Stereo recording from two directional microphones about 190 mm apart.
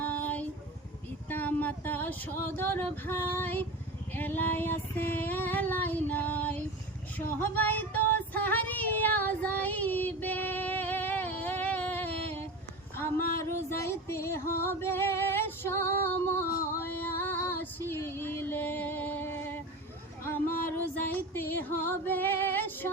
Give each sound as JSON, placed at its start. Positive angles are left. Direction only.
{"t": 0.0, "sound": "a sound", "side_deg": 10}
{"t": 4.1, "sound": "female singing", "side_deg": 10}
{"t": 7.3, "sound": "child singing", "side_deg": 10}
{"t": 13.1, "sound": "a sound", "side_deg": 50}
{"t": 13.4, "sound": "music", "side_deg": 15}
{"t": 16.7, "sound": "female singing", "side_deg": 10}
{"t": 20.7, "sound": "music", "side_deg": 10}